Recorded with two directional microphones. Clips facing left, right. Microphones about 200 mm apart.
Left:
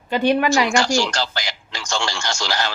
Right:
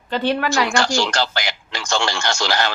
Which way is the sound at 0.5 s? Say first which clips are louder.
Left 1 dB; 60° right (ahead or behind).